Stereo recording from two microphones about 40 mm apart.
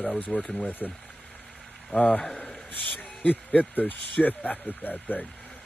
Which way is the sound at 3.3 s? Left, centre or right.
Left.